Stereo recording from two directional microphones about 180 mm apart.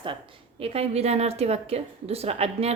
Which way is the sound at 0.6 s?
35° right (ahead or behind).